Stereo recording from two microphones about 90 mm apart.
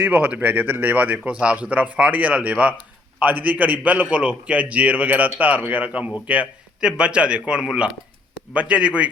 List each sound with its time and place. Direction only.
0.0 s speech: 20° right (ahead or behind)